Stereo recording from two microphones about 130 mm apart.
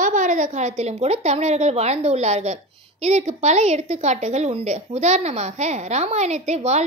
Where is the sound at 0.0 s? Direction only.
75° right (ahead or behind).